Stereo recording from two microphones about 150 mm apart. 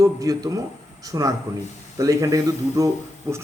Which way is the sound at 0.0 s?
25° right (ahead or behind).